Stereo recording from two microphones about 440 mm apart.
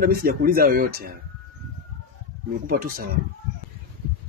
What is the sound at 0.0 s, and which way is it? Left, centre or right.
Speech, centre.